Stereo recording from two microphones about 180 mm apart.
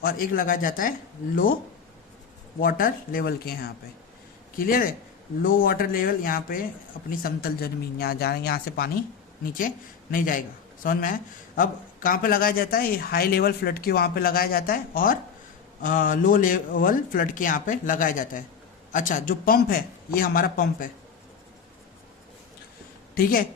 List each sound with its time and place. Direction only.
0.0 s a man's voice: 50° left (ahead or behind)
2.6 s a man's voice: 50° left (ahead or behind)